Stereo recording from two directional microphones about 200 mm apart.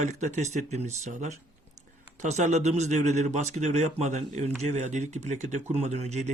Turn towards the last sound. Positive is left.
turn(degrees=-35)  # may be behind; listen again after turning